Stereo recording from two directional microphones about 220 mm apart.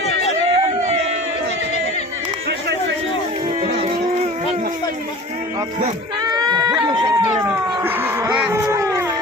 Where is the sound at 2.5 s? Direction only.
50° right (ahead or behind).